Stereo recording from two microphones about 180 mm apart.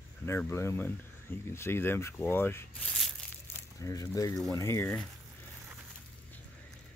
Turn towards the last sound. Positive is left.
turn(degrees=15)  # may be behind; listen again after turning